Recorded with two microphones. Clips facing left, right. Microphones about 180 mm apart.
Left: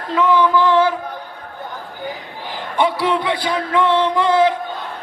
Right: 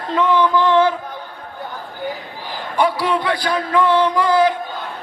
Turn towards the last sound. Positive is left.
turn(degrees=25)  # may be behind; listen again after turning